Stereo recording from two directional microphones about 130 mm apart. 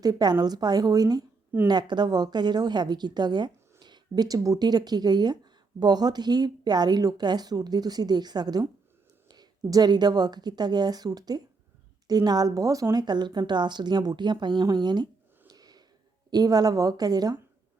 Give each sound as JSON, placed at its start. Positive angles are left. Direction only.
{"t": 0.0, "sound": "a woman's voice", "side_deg": -30}
{"t": 15.4, "sound": "a sound", "side_deg": -30}
{"t": 16.3, "sound": "a woman's voice", "side_deg": -30}